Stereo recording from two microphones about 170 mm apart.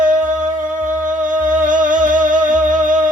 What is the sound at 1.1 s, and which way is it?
Music, 50° right (ahead or behind).